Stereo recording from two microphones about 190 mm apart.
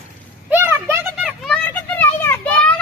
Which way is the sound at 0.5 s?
10° right (ahead or behind).